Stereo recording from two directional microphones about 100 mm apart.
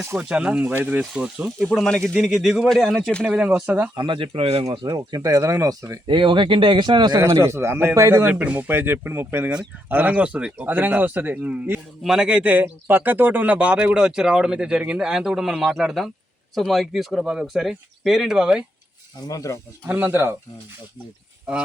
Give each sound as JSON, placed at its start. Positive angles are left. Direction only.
{"t": 0.2, "sound": "a man's voice", "side_deg": -10}
{"t": 1.6, "sound": "speech", "side_deg": 5}
{"t": 3.2, "sound": "a man's voice", "side_deg": -10}
{"t": 3.9, "sound": "speech", "side_deg": -55}
{"t": 4.7, "sound": "speech", "side_deg": -50}
{"t": 4.9, "sound": "speech", "side_deg": -35}
{"t": 6.1, "sound": "speech", "side_deg": -55}
{"t": 7.2, "sound": "speech", "side_deg": -25}
{"t": 8.3, "sound": "a man's voice", "side_deg": -15}
{"t": 12.0, "sound": "a man's voice", "side_deg": -5}
{"t": 19.3, "sound": "speech", "side_deg": 35}
{"t": 19.9, "sound": "speech", "side_deg": -20}